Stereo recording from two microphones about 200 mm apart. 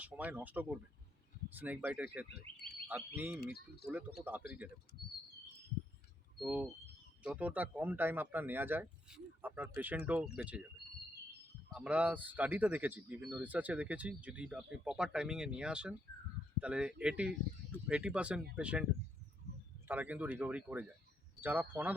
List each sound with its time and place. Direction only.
0.0 s speech: 10° right (ahead or behind)
3.4 s speech: 50° left (ahead or behind)
3.8 s speech: 10° right (ahead or behind)
6.4 s speech: 5° right (ahead or behind)
11.7 s speech: 5° right (ahead or behind)
19.9 s speech: 10° right (ahead or behind)